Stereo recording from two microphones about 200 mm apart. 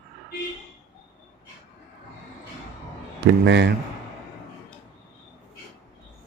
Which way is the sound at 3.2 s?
60° right (ahead or behind).